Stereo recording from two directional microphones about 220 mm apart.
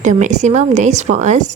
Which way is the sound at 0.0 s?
35° right (ahead or behind).